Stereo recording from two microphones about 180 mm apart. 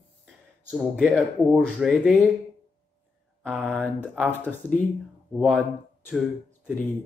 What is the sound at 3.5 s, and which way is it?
Speech, centre (ahead or behind).